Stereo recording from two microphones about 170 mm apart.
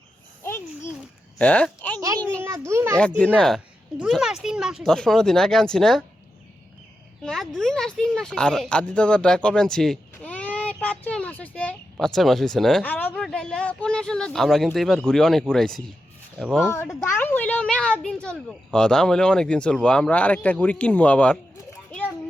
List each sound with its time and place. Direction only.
0.4 s a sound: 15° left (ahead or behind)
1.4 s a woman's voice: 5° left (ahead or behind)
2.0 s a sound: 20° right (ahead or behind)
2.4 s children playing: 15° right (ahead or behind)
3.3 s speech: centre (ahead or behind)
7.2 s a child's voice: centre (ahead or behind)